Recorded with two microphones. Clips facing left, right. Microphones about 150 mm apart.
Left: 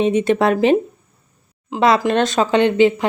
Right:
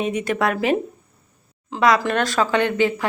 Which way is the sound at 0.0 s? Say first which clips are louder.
Left 6 dB; 25° left (ahead or behind).